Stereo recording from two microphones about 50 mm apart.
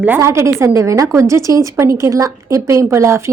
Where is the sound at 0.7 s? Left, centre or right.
Right.